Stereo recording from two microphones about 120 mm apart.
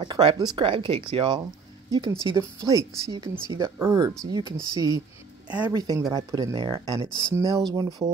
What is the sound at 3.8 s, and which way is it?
Speech, 25° right (ahead or behind).